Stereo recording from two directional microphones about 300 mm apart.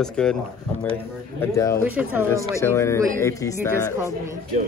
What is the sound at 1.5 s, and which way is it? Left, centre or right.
Speech, centre.